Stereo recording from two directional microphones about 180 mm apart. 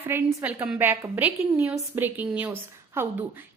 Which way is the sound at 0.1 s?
10° right (ahead or behind).